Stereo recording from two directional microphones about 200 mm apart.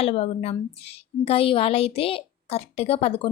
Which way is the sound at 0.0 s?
30° left (ahead or behind).